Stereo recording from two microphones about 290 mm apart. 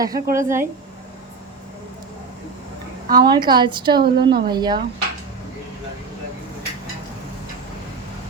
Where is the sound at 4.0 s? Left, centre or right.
Right.